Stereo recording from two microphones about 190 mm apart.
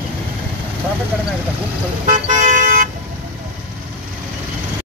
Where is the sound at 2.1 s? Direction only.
40° right (ahead or behind).